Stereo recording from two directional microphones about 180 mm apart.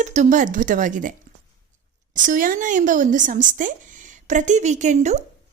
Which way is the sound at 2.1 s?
50° right (ahead or behind).